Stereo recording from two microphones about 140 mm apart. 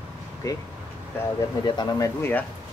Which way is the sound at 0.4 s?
25° left (ahead or behind).